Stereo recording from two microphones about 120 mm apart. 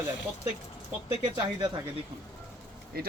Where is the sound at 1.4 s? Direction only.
35° right (ahead or behind).